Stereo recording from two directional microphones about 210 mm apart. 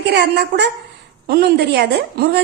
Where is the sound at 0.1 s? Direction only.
55° right (ahead or behind).